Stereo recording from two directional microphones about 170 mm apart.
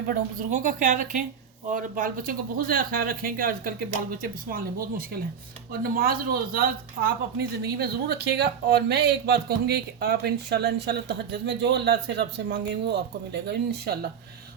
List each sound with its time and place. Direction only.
0.1 s speech: 55° right (ahead or behind)